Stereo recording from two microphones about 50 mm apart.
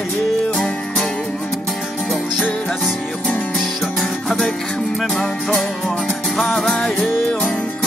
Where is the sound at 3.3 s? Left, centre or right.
Left.